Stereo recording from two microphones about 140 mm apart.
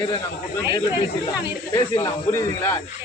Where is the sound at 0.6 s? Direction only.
30° left (ahead or behind).